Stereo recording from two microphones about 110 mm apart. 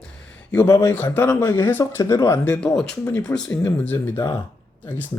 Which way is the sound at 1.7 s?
20° left (ahead or behind).